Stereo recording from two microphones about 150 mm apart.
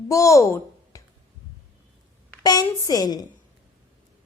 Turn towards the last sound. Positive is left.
turn(degrees=25)  # may be behind; listen again after turning